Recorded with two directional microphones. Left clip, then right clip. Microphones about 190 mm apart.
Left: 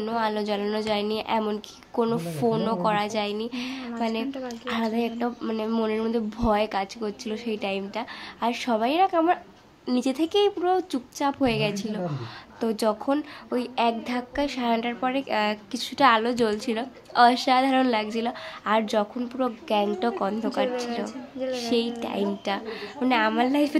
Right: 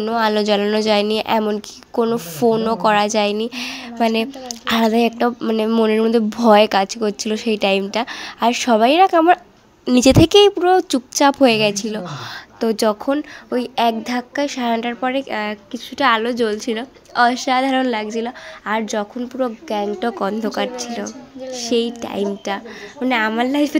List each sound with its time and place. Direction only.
0.0 s a woman's voice: 40° right (ahead or behind)
1.4 s a woman's voice: 30° right (ahead or behind)
12.5 s speech: 30° right (ahead or behind)